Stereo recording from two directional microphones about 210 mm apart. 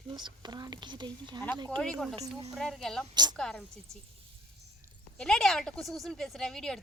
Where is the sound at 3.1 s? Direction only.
20° right (ahead or behind).